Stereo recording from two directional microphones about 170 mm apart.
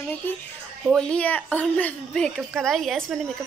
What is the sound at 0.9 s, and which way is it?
A woman's voice, 5° left (ahead or behind).